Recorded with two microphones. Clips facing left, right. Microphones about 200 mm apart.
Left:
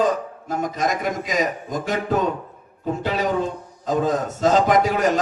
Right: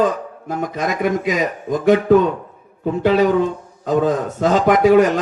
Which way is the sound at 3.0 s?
55° right (ahead or behind).